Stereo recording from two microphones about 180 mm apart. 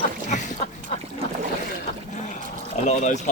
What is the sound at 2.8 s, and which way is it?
Speech, 40° left (ahead or behind).